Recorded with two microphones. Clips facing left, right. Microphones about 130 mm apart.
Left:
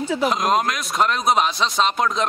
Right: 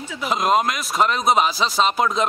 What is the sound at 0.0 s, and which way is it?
Speech, 35° left (ahead or behind).